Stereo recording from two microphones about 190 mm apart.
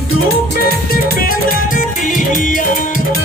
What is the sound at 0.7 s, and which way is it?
Music, 50° left (ahead or behind).